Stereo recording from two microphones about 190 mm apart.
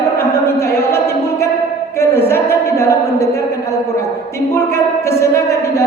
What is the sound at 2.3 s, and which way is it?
Speech, 15° left (ahead or behind).